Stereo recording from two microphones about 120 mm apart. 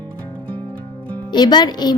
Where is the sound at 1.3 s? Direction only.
35° left (ahead or behind).